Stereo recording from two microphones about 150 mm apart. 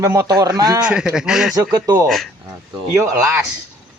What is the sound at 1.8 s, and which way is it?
Speech, 25° right (ahead or behind).